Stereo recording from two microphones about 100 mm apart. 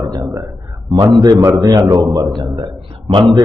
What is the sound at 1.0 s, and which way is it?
A man's voice, 40° right (ahead or behind).